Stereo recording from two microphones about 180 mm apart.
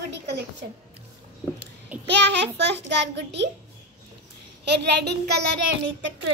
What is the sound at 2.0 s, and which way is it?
A child's voice, 75° right (ahead or behind).